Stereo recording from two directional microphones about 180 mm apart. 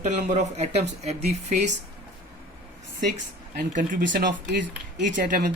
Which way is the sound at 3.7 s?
45° right (ahead or behind).